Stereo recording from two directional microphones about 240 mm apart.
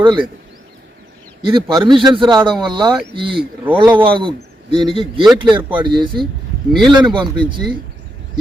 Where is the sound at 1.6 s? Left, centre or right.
Centre.